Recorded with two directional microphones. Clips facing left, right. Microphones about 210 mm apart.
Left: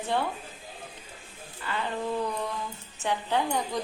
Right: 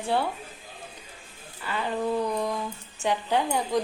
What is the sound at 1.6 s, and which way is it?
Speech, 10° right (ahead or behind).